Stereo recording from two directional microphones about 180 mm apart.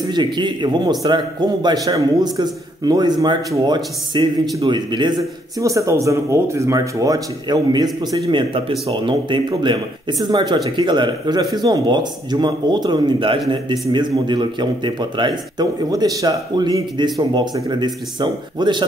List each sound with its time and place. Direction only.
0.0 s a man's voice: 25° right (ahead or behind)